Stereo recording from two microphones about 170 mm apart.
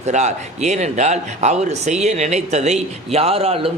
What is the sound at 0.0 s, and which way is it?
Speech, 40° right (ahead or behind).